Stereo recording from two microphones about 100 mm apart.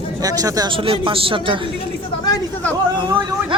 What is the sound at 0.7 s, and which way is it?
Speech, 60° right (ahead or behind).